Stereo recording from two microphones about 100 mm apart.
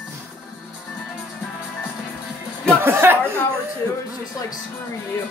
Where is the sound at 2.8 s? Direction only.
20° right (ahead or behind).